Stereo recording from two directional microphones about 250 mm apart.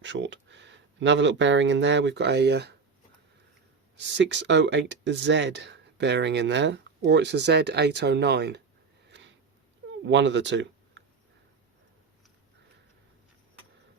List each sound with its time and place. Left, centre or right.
0.0 s speech: right
3.9 s speech: right
9.0 s sniff: right
10.0 s speech: right